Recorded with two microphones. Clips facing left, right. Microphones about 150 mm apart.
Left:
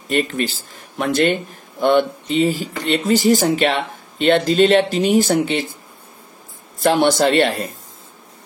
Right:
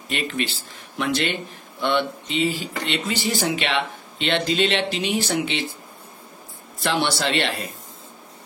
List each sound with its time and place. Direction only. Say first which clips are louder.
0.1 s speech: left 7 dB; 45° left (ahead or behind)
6.8 s speech: left 8 dB; 45° left (ahead or behind)